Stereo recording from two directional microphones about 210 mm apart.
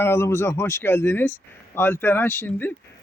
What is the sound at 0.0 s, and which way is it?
A man's voice, 10° left (ahead or behind).